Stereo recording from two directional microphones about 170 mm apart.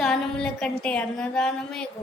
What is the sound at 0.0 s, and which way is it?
A woman's voice, 5° left (ahead or behind).